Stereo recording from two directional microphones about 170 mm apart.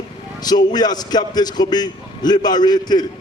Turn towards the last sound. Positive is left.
turn(degrees=25)  # may be behind; listen again after turning